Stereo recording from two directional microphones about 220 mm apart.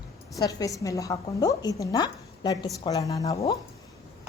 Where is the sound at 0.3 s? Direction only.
15° left (ahead or behind).